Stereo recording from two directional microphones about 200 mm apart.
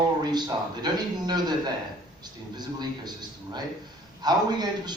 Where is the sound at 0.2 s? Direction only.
20° right (ahead or behind).